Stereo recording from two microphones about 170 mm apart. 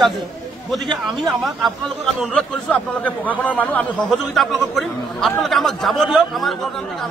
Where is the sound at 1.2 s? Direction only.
Centre (ahead or behind).